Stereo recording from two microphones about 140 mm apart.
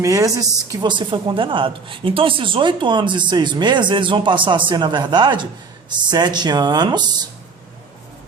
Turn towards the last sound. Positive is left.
turn(degrees=-30)  # may be behind; listen again after turning